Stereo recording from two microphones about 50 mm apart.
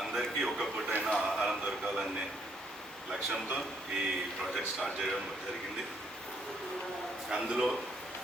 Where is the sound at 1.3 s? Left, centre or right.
Right.